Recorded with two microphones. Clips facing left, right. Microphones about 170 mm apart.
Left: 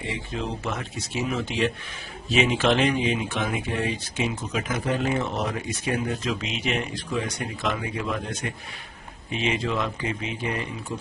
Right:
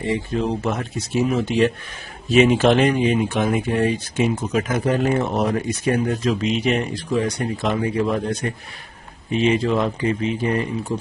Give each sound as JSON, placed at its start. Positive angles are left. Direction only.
{"t": 0.0, "sound": "a man's voice", "side_deg": -45}